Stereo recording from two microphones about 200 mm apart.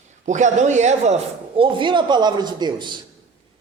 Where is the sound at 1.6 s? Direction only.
25° right (ahead or behind).